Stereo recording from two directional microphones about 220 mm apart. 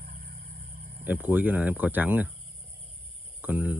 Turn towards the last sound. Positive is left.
turn(degrees=-5)  # may be behind; listen again after turning